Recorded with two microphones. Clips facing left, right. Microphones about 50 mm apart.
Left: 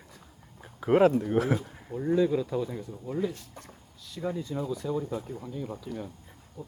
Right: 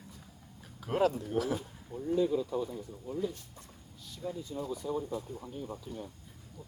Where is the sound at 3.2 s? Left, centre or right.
Left.